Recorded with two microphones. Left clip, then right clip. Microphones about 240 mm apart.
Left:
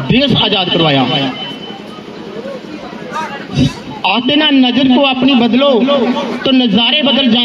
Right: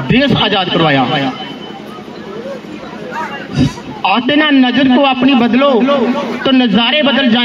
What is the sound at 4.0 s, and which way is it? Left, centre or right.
A man's voice, left.